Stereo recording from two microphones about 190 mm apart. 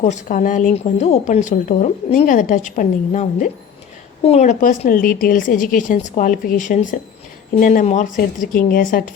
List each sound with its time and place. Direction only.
0.0 s a woman's voice: 40° left (ahead or behind)